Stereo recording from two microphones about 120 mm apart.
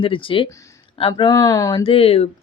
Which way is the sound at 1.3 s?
30° left (ahead or behind).